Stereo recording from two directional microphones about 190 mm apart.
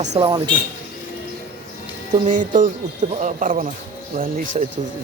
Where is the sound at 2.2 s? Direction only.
40° right (ahead or behind).